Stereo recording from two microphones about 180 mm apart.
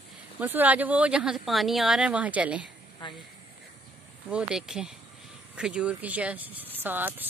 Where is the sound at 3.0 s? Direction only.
25° left (ahead or behind).